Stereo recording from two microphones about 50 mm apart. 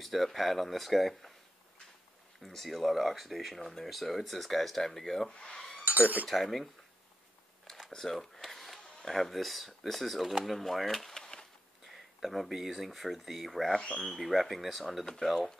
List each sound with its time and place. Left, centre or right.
0.0 s speech: centre
2.4 s speech: centre
5.4 s cutlery: centre
5.9 s cutlery: right
6.2 s speech: centre
7.9 s speech: centre